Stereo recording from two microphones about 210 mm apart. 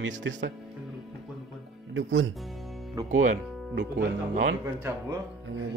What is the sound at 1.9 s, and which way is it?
Music, 65° right (ahead or behind).